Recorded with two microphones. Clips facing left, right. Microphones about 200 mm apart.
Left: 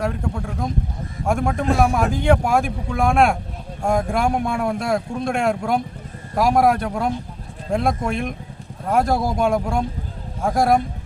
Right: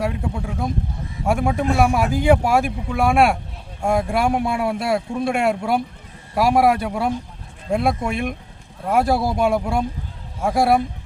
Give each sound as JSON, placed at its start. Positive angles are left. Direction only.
{"t": 0.0, "sound": "a man's voice", "side_deg": -5}